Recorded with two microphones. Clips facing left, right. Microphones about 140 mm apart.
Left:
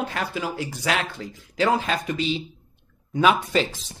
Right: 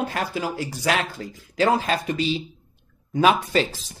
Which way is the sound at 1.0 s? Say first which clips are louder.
Right 1 dB; 10° right (ahead or behind).